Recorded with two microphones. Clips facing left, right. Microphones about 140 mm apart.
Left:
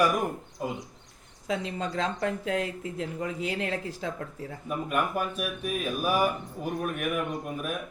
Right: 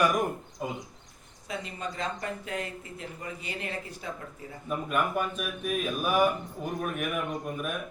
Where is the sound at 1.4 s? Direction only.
90° left.